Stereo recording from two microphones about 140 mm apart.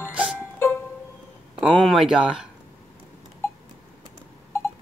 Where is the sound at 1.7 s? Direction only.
Centre (ahead or behind).